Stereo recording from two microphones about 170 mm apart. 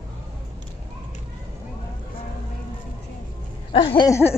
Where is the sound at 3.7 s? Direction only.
30° left (ahead or behind).